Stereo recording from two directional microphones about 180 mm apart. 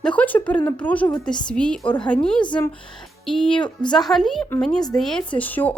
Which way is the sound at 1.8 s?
25° left (ahead or behind).